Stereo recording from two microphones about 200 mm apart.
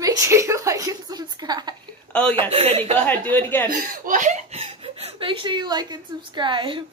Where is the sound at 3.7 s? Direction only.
40° right (ahead or behind); by 6.9 s 25° right (ahead or behind).